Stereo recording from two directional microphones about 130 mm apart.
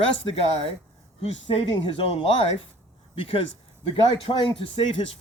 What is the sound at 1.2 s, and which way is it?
Speech, 45° left (ahead or behind).